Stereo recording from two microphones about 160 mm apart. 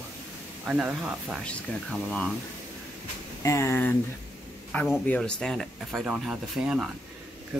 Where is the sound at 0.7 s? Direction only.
5° right (ahead or behind).